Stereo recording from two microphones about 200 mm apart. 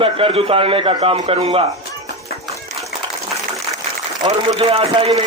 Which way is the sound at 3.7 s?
25° right (ahead or behind).